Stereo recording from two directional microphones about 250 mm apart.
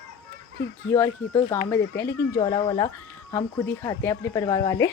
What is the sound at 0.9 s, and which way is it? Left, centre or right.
Speech, centre.